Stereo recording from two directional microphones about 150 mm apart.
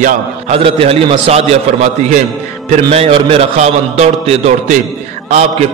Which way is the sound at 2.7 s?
45° right (ahead or behind).